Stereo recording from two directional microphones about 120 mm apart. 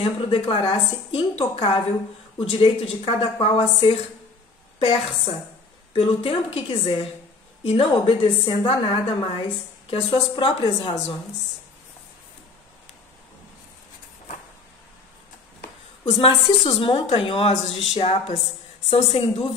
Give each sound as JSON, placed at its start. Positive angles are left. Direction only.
{"t": 0.0, "sound": "a woman's voice", "side_deg": 45}
{"t": 16.4, "sound": "a woman's voice", "side_deg": 50}
{"t": 17.5, "sound": "speech", "side_deg": 65}